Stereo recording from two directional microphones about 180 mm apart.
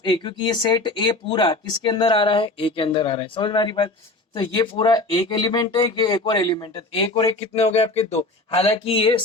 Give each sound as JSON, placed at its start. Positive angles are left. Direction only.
{"t": 0.0, "sound": "speech", "side_deg": 25}